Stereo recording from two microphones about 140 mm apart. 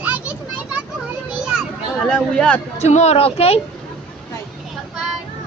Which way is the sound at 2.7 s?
55° left (ahead or behind).